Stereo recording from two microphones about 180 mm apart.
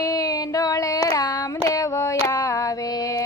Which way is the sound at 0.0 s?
20° left (ahead or behind).